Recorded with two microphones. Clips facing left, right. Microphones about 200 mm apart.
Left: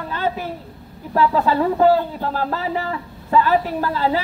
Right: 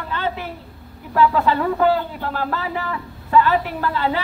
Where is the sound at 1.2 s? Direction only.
35° left (ahead or behind).